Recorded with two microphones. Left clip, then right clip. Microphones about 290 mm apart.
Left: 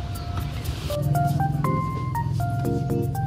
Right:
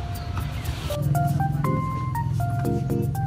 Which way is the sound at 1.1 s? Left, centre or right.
Centre.